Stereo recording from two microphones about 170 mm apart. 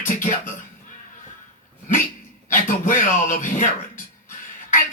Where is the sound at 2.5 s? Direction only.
50° left (ahead or behind).